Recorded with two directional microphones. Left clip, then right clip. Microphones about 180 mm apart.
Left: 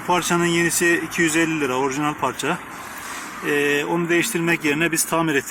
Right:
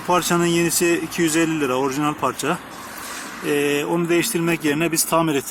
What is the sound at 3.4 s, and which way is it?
Speech, 15° right (ahead or behind).